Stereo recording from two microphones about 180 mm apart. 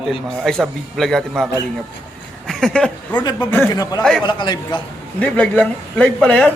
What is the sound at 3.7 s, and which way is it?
Speech, 20° left (ahead or behind).